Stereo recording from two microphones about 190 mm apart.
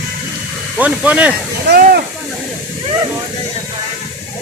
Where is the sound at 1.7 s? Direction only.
55° right (ahead or behind).